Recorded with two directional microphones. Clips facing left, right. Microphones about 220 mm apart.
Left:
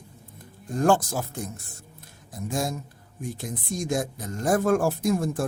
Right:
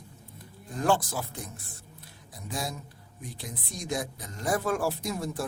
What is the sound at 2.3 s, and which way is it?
Speech, 45° left (ahead or behind).